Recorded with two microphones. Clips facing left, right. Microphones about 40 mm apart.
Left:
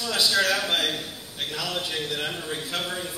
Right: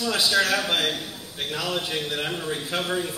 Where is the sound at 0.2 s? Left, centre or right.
Centre.